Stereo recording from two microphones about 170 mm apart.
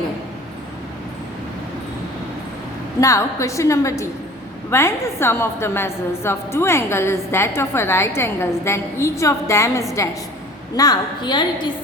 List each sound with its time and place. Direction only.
3.0 s a woman's voice: 20° left (ahead or behind)